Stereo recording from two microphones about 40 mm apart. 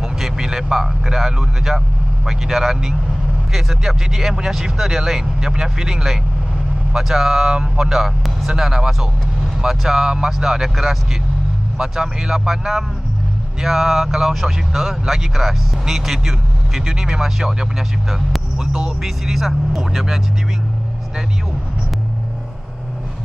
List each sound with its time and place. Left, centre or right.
0.4 s speech: centre
7.9 s speech: centre
19.0 s speech: centre